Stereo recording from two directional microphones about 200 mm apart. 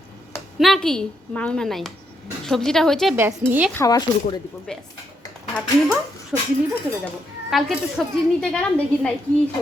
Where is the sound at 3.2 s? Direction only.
10° right (ahead or behind).